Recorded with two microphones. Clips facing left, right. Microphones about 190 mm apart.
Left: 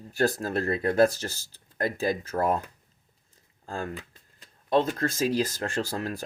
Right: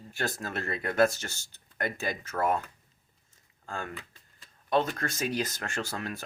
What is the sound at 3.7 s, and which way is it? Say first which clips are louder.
Speech: left 4 dB; 35° left (ahead or behind).